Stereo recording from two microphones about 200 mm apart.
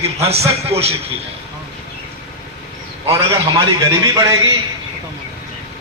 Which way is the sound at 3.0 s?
25° right (ahead or behind).